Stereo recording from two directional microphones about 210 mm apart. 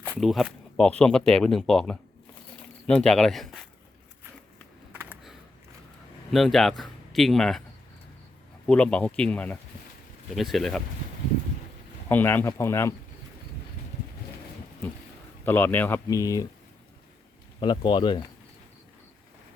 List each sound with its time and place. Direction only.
0.0 s speech: 5° right (ahead or behind)
4.9 s a sound: 10° right (ahead or behind)
6.3 s speech: centre (ahead or behind)
8.6 s speech: 5° left (ahead or behind)
12.0 s speech: 10° left (ahead or behind)
15.4 s speech: 10° left (ahead or behind)
17.6 s speech: 25° left (ahead or behind)